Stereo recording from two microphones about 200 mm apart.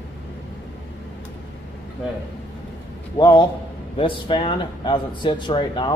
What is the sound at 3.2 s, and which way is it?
Speech, 25° left (ahead or behind).